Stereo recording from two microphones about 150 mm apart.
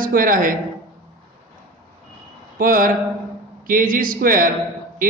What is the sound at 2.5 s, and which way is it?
A man's voice, 65° right (ahead or behind).